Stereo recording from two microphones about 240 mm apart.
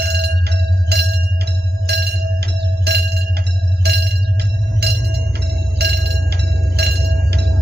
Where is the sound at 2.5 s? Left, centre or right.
Right.